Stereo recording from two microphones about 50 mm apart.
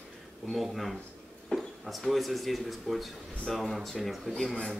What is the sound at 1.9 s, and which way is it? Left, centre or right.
Speech, centre.